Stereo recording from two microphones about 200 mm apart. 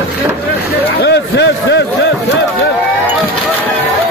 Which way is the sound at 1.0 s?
60° left (ahead or behind).